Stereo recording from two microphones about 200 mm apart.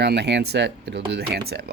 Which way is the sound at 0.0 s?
55° right (ahead or behind).